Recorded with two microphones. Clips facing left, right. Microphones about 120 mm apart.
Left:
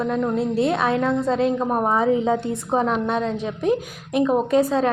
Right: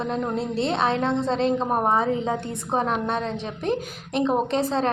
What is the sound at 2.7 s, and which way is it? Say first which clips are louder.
Speech: left 3 dB; 20° right (ahead or behind).